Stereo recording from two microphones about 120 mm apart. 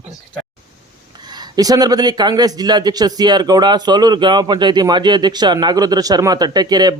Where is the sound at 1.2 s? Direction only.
35° right (ahead or behind).